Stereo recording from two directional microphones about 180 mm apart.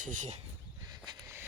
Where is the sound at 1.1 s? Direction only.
15° right (ahead or behind).